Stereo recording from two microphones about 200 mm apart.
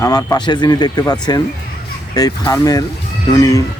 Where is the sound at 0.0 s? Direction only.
20° left (ahead or behind).